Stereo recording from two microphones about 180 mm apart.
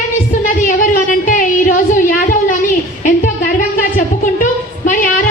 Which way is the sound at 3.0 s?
50° left (ahead or behind).